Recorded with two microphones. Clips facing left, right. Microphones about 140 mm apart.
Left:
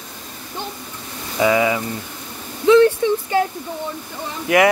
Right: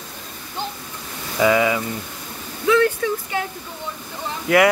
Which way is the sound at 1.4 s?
25° left (ahead or behind).